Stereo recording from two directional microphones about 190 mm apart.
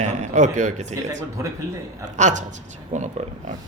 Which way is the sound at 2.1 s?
40° right (ahead or behind).